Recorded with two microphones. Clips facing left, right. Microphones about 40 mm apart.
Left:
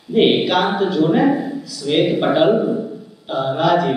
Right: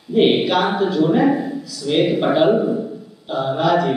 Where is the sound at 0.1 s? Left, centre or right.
Left.